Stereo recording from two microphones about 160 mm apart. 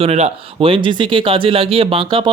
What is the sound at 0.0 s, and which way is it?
Speech, 40° right (ahead or behind).